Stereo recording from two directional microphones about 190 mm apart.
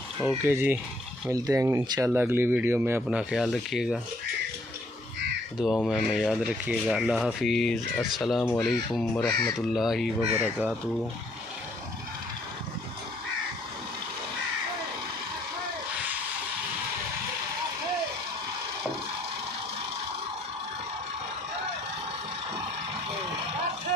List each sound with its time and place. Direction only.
0.5 s speech: 10° right (ahead or behind)
5.6 s speech: centre (ahead or behind)
10.3 s speech: 10° right (ahead or behind)